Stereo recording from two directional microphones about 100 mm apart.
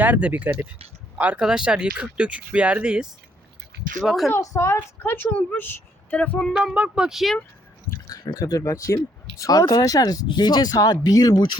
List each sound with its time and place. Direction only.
0.0 s speech: 15° right (ahead or behind)
4.3 s a woman's voice: 30° left (ahead or behind); by 6.5 s 10° left (ahead or behind)
6.7 s speech: 10° right (ahead or behind)
7.9 s speech: 40° left (ahead or behind)